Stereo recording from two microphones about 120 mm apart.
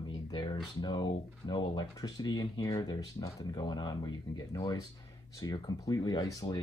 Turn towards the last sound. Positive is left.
turn(degrees=30)  # may be behind; listen again after turning